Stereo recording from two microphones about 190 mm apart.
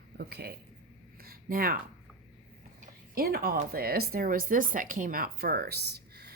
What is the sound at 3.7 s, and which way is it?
Speech, 55° right (ahead or behind).